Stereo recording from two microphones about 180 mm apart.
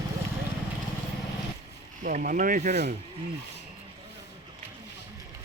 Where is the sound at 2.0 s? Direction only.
50° right (ahead or behind).